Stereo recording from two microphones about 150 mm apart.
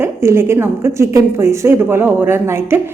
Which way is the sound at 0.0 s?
15° right (ahead or behind).